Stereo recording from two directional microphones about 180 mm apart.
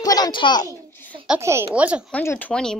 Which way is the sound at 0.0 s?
20° left (ahead or behind).